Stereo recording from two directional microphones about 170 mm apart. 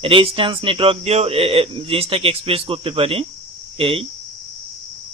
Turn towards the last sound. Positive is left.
turn(degrees=-30)  # may be behind; listen again after turning